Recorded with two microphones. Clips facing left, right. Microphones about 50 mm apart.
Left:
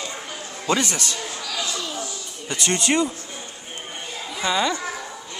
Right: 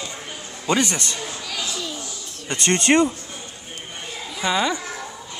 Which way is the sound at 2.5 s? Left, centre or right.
Right.